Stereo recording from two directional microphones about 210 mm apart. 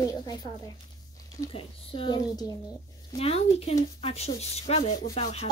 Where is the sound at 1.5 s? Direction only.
25° left (ahead or behind).